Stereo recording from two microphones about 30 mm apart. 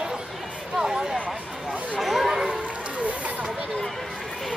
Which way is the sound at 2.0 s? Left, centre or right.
Centre.